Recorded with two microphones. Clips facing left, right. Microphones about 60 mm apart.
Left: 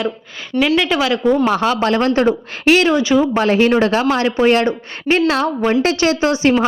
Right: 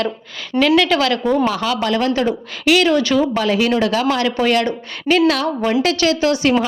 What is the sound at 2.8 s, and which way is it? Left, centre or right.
Speech, centre.